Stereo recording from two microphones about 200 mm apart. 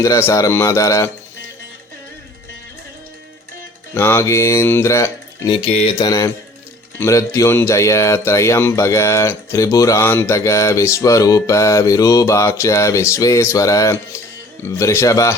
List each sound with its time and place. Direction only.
0.0 s speech: 15° left (ahead or behind)
3.9 s speech: 15° left (ahead or behind)
5.6 s speech: 30° left (ahead or behind)